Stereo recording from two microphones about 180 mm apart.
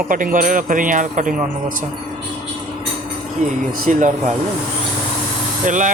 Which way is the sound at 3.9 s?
45° right (ahead or behind).